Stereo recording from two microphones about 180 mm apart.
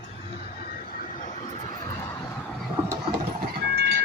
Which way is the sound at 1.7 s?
20° left (ahead or behind).